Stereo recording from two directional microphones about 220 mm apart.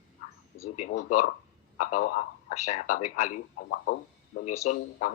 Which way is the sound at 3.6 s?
50° left (ahead or behind).